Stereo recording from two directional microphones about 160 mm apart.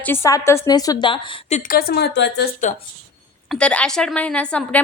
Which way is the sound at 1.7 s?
75° left (ahead or behind).